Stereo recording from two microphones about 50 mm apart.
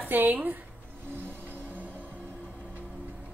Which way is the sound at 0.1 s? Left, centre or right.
Right.